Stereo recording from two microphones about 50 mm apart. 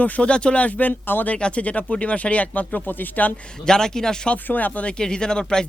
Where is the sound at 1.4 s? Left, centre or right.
Left.